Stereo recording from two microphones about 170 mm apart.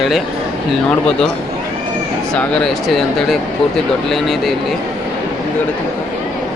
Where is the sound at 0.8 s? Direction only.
5° left (ahead or behind).